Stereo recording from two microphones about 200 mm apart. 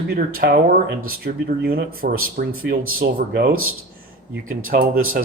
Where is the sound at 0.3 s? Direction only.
45° right (ahead or behind).